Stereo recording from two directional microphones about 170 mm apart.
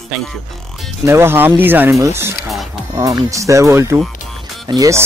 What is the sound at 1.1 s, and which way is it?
Speech, 15° right (ahead or behind).